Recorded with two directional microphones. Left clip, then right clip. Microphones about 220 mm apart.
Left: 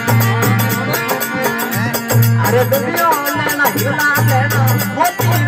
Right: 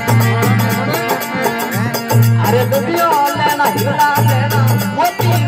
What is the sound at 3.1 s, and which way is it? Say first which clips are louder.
Music: right 2 dB; 45° right (ahead or behind).